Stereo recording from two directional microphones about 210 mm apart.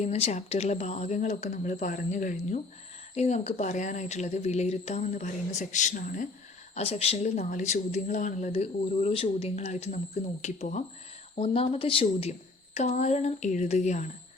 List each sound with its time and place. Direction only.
0.0 s speech: 30° left (ahead or behind)
6.7 s speech: 30° left (ahead or behind)